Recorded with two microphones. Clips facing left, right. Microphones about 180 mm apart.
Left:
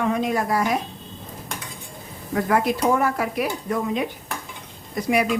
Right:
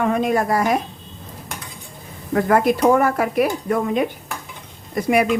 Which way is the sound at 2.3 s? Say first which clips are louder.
Right 4 dB; 50° right (ahead or behind).